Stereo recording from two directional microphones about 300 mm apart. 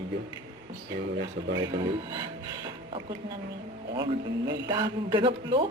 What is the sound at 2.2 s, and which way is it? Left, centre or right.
Speech, centre.